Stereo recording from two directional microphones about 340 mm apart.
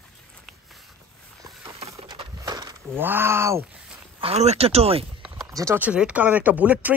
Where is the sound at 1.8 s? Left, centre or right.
Centre.